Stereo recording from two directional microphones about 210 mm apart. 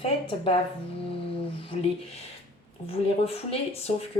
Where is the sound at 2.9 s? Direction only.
30° left (ahead or behind).